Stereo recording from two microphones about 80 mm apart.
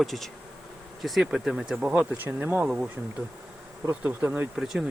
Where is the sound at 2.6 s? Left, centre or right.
Centre.